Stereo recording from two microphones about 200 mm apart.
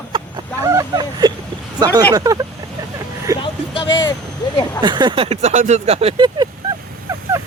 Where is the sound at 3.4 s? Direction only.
25° left (ahead or behind).